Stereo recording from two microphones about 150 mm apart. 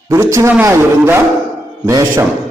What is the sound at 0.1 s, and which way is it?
A man's voice, 20° right (ahead or behind).